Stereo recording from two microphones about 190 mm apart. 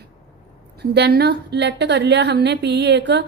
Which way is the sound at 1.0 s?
60° right (ahead or behind).